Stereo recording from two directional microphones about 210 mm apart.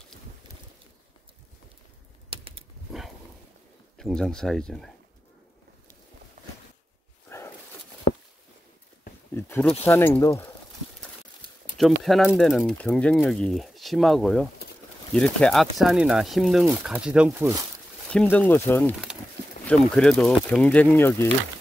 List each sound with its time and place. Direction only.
2.2 s a sound: 25° right (ahead or behind)
4.0 s speech: 5° left (ahead or behind)
7.2 s walk: 10° left (ahead or behind)
9.3 s speech: 10° left (ahead or behind)
11.7 s speech: centre (ahead or behind)
18.1 s speech: 10° left (ahead or behind)